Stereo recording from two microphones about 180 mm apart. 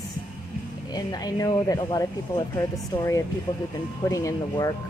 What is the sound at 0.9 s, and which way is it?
Speech, 20° left (ahead or behind).